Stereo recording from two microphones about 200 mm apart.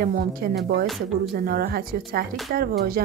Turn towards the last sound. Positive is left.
turn(degrees=-50)  # may be behind; listen again after turning